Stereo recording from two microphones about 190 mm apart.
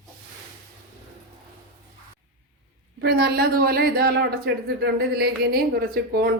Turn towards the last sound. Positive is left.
turn(degrees=-55)  # may be behind; listen again after turning